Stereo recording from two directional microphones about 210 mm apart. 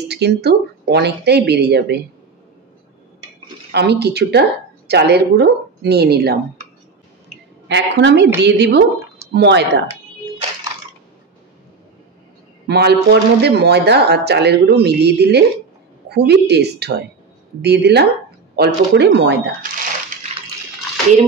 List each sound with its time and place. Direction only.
0.1 s speech: 50° right (ahead or behind)
3.7 s speech: 50° right (ahead or behind)
7.6 s speech: 55° right (ahead or behind)
12.6 s speech: 50° right (ahead or behind)